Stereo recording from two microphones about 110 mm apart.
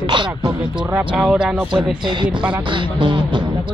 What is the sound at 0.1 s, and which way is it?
Speech, 50° right (ahead or behind).